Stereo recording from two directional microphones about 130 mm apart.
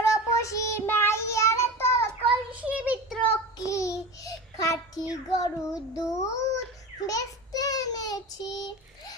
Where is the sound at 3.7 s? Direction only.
25° left (ahead or behind).